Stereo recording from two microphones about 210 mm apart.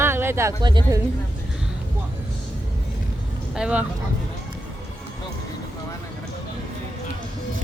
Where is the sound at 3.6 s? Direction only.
5° right (ahead or behind).